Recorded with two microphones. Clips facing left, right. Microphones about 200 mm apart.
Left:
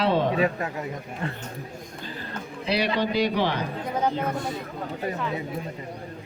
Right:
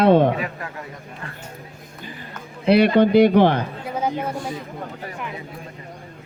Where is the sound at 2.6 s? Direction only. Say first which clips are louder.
Right 10 dB; 55° right (ahead or behind).